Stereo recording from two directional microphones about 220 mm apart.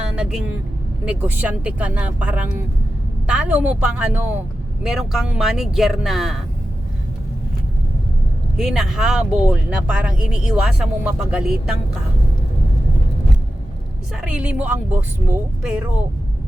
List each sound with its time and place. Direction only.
0.2 s a woman's voice: centre (ahead or behind)
8.5 s speech: centre (ahead or behind)
14.2 s speech: 5° right (ahead or behind)